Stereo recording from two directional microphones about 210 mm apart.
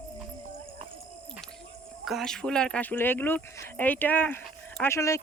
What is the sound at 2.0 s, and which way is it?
Speech, centre (ahead or behind).